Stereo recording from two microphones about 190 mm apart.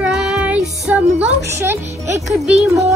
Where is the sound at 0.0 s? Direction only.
Centre (ahead or behind).